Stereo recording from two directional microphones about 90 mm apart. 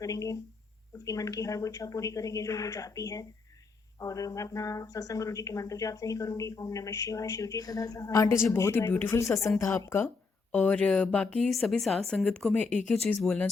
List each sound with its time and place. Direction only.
0.0 s speech: 40° left (ahead or behind)
8.7 s speech: 20° left (ahead or behind)
10.5 s a woman's voice: 15° left (ahead or behind)